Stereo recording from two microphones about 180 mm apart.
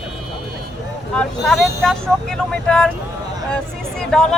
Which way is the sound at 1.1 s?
Centre (ahead or behind).